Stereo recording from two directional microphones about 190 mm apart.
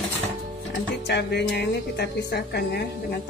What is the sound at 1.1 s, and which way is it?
A woman's voice, 60° left (ahead or behind).